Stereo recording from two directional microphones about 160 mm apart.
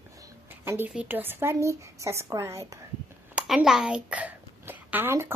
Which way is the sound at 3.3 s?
5° right (ahead or behind).